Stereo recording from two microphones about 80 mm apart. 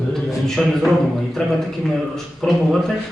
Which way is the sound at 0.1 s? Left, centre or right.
Centre.